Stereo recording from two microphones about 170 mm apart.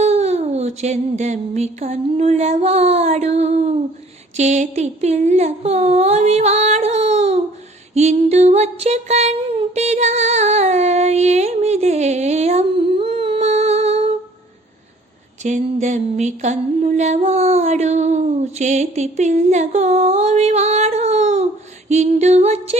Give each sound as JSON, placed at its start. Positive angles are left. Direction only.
{"t": 0.0, "sound": "a sound", "side_deg": -40}
{"t": 4.4, "sound": "music", "side_deg": -45}
{"t": 7.9, "sound": "female singing", "side_deg": -40}
{"t": 15.4, "sound": "music", "side_deg": -45}